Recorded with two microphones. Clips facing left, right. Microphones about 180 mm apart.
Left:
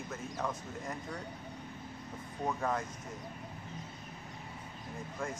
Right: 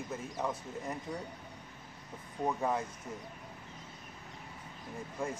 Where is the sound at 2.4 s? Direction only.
15° right (ahead or behind).